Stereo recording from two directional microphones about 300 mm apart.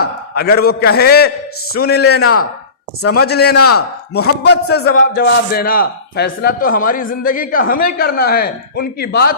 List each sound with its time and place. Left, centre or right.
0.3 s a man's voice: left
2.2 s speech: left
3.2 s a man's voice: left